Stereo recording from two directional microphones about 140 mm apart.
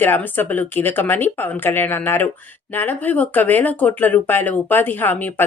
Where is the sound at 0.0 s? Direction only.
15° left (ahead or behind).